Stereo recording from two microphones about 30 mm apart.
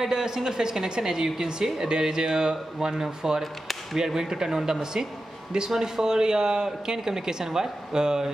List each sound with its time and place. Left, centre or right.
0.0 s a woman's voice: centre
5.8 s a woman's voice: centre